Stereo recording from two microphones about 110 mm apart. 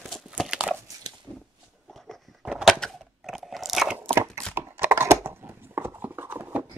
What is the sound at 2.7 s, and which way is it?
Chewing, 5° left (ahead or behind).